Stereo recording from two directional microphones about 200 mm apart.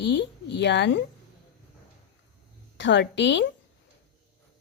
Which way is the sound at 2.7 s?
65° left (ahead or behind).